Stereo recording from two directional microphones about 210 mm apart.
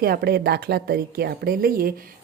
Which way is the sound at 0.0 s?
45° right (ahead or behind).